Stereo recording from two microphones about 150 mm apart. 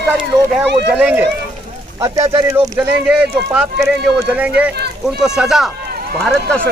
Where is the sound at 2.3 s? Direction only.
25° right (ahead or behind).